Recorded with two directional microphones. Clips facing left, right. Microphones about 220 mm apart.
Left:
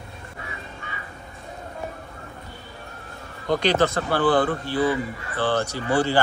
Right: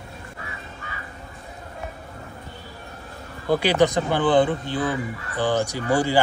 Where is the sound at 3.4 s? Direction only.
10° right (ahead or behind).